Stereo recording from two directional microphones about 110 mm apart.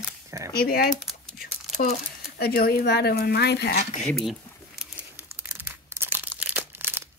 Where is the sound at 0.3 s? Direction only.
30° right (ahead or behind).